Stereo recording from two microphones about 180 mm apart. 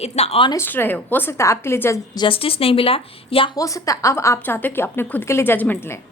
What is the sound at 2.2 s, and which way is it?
Speech, 30° left (ahead or behind).